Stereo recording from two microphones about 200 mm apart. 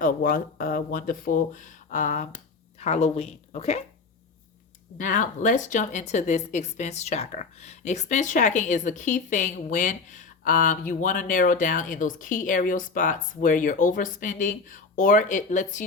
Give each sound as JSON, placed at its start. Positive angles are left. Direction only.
{"t": 0.0, "sound": "speech", "side_deg": 45}
{"t": 4.9, "sound": "speech", "side_deg": 40}